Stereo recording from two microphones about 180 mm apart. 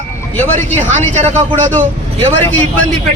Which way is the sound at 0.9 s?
40° right (ahead or behind).